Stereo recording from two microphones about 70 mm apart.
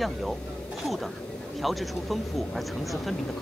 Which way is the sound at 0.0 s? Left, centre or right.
Centre.